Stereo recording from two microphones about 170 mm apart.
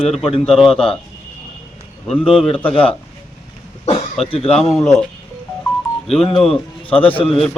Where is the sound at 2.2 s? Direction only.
5° right (ahead or behind).